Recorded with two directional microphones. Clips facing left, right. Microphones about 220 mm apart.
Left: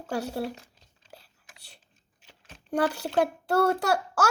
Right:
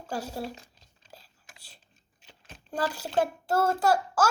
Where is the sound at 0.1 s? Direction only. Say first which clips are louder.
Left 4 dB; 60° left (ahead or behind).